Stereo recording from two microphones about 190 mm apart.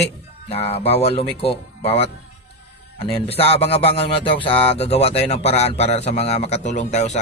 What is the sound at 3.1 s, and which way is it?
Speech, 30° left (ahead or behind).